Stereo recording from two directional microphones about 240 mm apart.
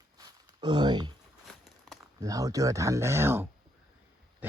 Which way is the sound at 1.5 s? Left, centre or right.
Centre.